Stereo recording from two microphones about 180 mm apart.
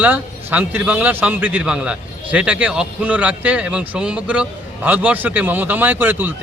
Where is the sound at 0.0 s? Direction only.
10° right (ahead or behind).